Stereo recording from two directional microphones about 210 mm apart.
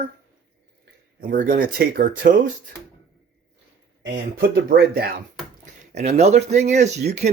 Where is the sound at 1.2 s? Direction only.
45° right (ahead or behind).